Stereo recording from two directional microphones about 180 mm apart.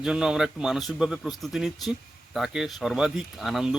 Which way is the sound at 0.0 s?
5° right (ahead or behind).